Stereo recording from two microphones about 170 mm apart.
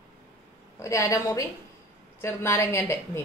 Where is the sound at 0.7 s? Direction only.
15° left (ahead or behind).